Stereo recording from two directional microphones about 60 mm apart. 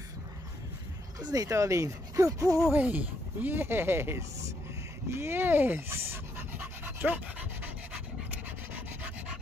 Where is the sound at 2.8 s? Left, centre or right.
Right.